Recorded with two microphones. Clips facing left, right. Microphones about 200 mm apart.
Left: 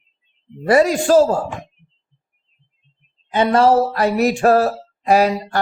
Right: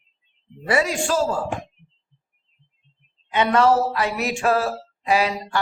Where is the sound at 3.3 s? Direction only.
30° left (ahead or behind).